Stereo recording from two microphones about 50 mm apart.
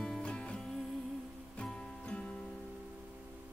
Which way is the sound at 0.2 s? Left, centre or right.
Left.